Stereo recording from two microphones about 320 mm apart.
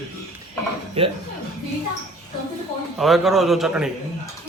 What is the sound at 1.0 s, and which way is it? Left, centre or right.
Speech, centre.